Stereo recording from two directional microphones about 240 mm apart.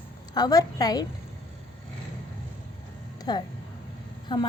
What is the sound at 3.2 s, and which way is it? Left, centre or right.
Speech, centre.